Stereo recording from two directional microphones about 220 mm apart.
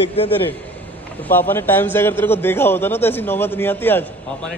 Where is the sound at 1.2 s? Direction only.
10° left (ahead or behind).